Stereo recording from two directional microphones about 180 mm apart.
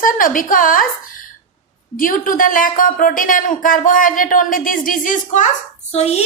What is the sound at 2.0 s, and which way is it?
A woman's voice, 50° left (ahead or behind).